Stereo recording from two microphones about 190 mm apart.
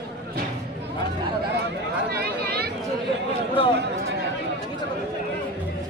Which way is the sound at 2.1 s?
55° right (ahead or behind).